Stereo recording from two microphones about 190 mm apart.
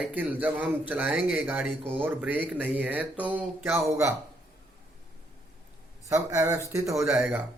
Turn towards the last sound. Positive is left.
turn(degrees=-15)  # may be behind; listen again after turning